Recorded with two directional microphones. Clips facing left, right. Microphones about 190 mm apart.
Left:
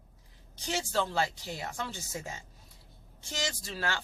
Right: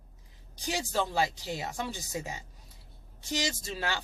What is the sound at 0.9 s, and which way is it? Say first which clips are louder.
Speech: right 1 dB; 15° right (ahead or behind).